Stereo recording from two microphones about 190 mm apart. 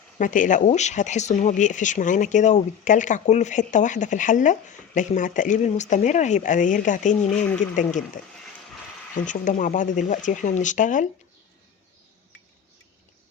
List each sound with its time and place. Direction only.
0.2 s speech: 45° left (ahead or behind)
7.2 s speech: 5° left (ahead or behind)
9.1 s speech: 40° left (ahead or behind)